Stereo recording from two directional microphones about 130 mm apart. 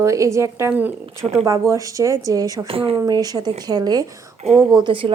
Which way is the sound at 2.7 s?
45° right (ahead or behind).